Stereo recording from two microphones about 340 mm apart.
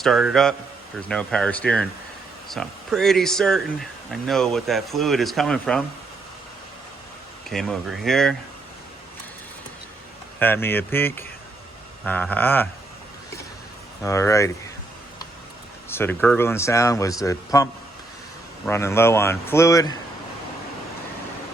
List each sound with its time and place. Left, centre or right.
0.0 s speech: centre
7.5 s speech: centre
10.4 s speech: centre
14.0 s speech: centre
15.9 s speech: centre